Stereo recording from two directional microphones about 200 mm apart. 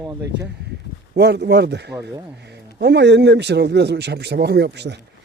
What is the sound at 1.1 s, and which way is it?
A man's voice, 55° right (ahead or behind).